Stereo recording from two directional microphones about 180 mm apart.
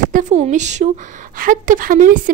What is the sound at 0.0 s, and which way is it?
Speech, 45° right (ahead or behind).